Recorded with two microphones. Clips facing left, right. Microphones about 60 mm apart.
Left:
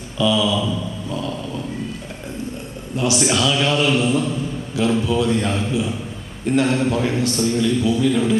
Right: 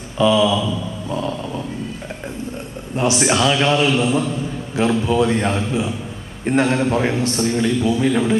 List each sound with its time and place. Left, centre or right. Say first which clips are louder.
0.2 s a man's voice: right 3 dB; right
1.1 s a sound: right 3 dB; right
2.9 s a man's voice: right 2 dB; right